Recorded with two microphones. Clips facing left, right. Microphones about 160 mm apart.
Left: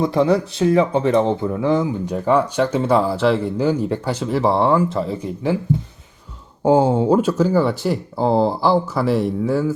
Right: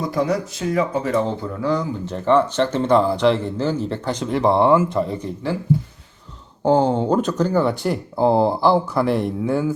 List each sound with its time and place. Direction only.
0.0 s speech: 25° left (ahead or behind)
2.1 s speech: 10° left (ahead or behind)
6.6 s speech: 5° left (ahead or behind)